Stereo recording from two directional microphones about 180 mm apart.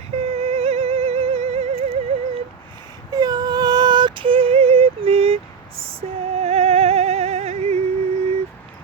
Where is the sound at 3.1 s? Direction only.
20° right (ahead or behind).